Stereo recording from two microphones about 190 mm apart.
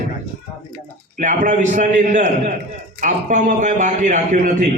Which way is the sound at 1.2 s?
40° right (ahead or behind).